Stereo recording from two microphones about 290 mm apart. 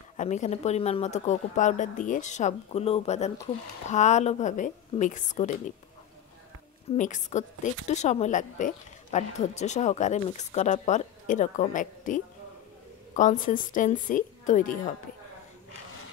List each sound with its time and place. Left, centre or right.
0.2 s speech: left
7.0 s speech: left